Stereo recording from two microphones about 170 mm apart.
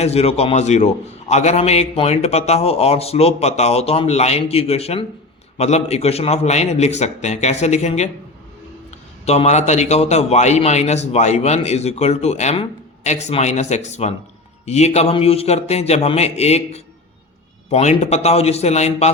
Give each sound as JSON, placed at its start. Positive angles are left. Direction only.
{"t": 0.0, "sound": "a man's voice", "side_deg": 35}
{"t": 9.2, "sound": "a man's voice", "side_deg": 40}